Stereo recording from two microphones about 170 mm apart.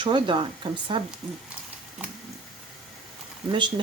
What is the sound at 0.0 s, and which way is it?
Speech, 30° right (ahead or behind).